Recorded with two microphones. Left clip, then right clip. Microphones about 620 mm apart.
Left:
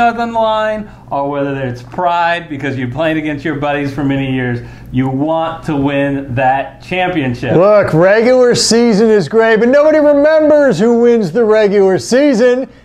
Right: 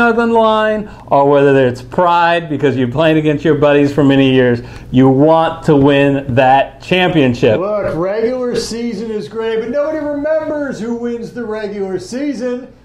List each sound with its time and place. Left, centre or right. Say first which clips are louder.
0.0 s speech: right 1 dB; centre
7.6 s a man's voice: left 8 dB; left